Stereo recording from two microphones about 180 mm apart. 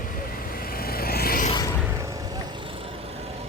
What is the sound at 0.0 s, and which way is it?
Vehicle, 50° left (ahead or behind).